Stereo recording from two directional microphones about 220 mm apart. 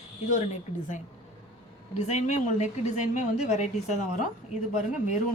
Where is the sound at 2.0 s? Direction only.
30° left (ahead or behind).